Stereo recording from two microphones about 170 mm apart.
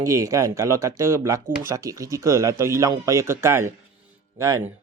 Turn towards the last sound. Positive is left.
turn(degrees=-20)  # may be behind; listen again after turning